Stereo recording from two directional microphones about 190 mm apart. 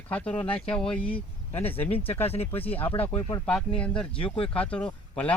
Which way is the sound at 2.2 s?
30° left (ahead or behind).